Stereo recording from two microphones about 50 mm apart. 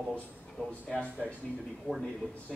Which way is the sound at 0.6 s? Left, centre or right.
Left.